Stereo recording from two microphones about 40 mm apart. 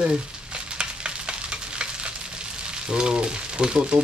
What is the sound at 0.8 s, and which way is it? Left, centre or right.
Frying, right.